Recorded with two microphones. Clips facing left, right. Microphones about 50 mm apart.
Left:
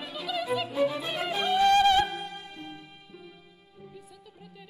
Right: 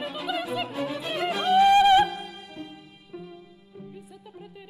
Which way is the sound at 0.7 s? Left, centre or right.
Centre.